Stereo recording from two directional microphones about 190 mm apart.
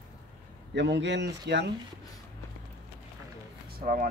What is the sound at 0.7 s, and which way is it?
Speech, 65° right (ahead or behind).